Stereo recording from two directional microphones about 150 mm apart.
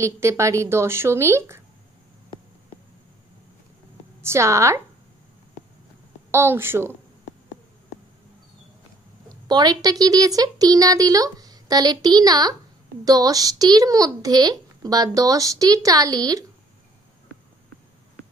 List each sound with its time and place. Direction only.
0.0 s speech: 20° right (ahead or behind)
4.2 s a child's voice: 20° right (ahead or behind)
6.3 s speech: 15° right (ahead or behind)
9.5 s a child's voice: 25° right (ahead or behind)